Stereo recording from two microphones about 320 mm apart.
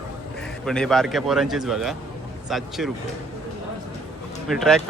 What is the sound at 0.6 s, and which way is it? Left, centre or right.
Speech, centre.